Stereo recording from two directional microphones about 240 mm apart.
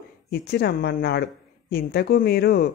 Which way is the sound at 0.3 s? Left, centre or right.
Left.